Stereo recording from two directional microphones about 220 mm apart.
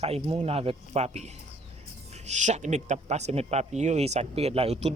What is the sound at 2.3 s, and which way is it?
Speech, 30° right (ahead or behind).